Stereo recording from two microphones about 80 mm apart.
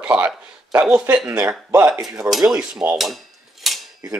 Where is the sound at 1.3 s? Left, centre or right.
Right.